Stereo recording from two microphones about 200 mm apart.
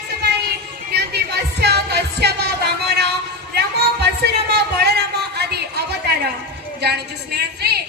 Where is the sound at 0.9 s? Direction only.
55° right (ahead or behind).